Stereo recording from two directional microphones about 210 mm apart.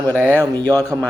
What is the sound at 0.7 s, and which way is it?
Speech, 15° right (ahead or behind).